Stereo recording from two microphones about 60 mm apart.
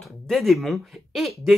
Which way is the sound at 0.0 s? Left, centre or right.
Centre.